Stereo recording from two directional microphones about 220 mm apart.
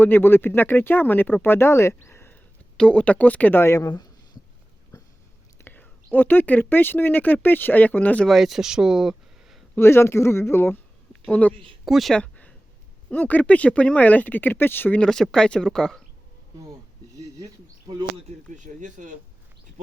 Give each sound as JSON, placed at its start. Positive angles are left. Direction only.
{"t": 0.0, "sound": "speech", "side_deg": 10}
{"t": 5.6, "sound": "speech", "side_deg": 10}
{"t": 9.7, "sound": "speech", "side_deg": 10}
{"t": 17.2, "sound": "a sound", "side_deg": -15}
{"t": 18.5, "sound": "speech", "side_deg": -35}